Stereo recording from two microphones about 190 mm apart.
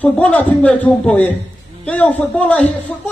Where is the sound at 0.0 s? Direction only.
10° left (ahead or behind).